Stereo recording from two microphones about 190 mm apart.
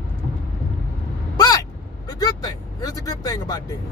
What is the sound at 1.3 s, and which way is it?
Vehicle, 20° left (ahead or behind).